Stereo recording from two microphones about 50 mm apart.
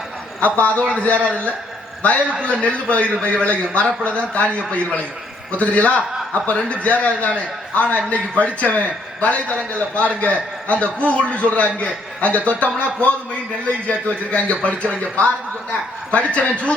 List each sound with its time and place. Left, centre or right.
0.3 s a man's voice: left
16.1 s a man's voice: left